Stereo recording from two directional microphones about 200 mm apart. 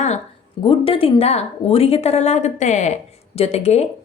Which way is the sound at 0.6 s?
25° left (ahead or behind).